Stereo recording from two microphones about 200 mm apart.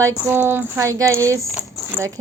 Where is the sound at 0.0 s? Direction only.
10° right (ahead or behind).